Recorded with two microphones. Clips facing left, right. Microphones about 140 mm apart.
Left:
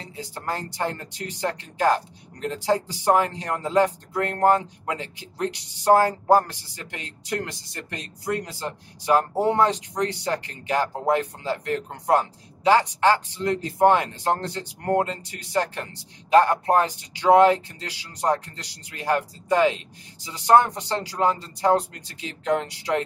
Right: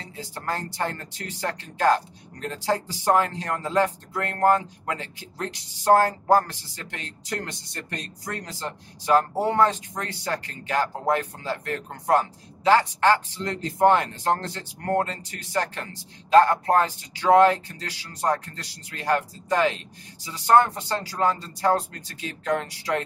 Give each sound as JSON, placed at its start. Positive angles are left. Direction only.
{"t": 0.1, "sound": "speech", "side_deg": 15}